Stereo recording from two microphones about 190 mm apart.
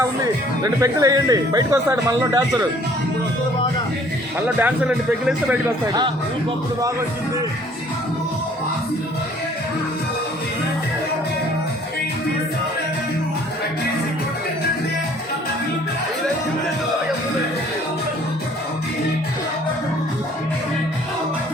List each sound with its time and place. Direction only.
0.6 s speech: 20° right (ahead or behind)
4.4 s speech: 10° right (ahead or behind)